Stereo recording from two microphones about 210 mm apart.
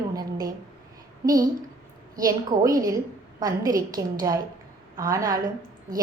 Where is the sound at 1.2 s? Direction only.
15° right (ahead or behind).